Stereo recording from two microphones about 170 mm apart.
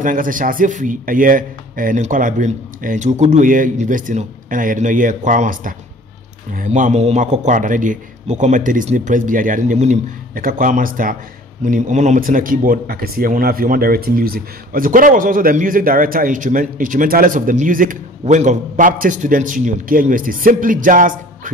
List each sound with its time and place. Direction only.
0.0 s speech: 50° right (ahead or behind)